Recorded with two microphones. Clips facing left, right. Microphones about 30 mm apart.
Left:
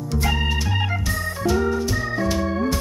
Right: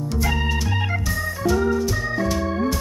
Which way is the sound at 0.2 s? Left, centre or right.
Centre.